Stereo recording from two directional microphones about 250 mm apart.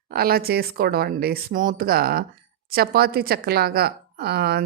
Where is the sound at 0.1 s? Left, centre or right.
Right.